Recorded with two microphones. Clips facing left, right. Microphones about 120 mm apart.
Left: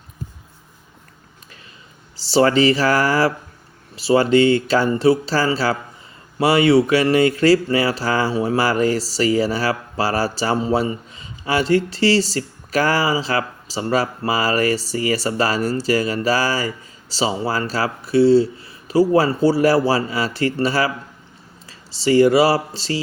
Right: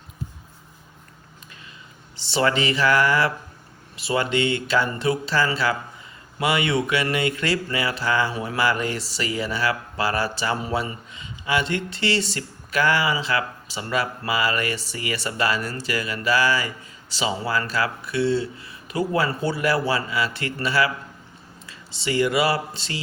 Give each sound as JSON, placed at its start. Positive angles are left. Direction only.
{"t": 2.1, "sound": "speech", "side_deg": 35}